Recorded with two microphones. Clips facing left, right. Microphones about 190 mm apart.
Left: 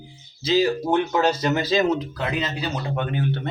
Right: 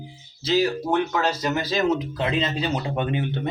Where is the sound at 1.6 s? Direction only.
20° left (ahead or behind).